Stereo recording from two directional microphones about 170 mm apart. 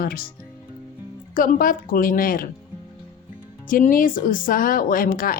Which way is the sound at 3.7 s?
55° left (ahead or behind).